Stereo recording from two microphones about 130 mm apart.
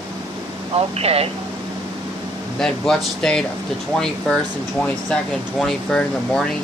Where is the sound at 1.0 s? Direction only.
50° right (ahead or behind).